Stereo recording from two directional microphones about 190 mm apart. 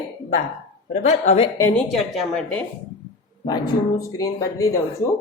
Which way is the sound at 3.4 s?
20° left (ahead or behind).